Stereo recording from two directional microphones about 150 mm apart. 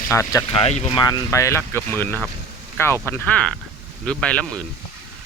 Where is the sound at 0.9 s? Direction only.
25° left (ahead or behind); by 4.6 s 10° left (ahead or behind).